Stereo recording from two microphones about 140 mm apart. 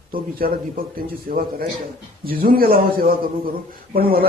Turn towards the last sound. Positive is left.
turn(degrees=-90)